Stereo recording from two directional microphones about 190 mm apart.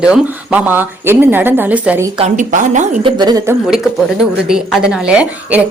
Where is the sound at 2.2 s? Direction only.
40° right (ahead or behind).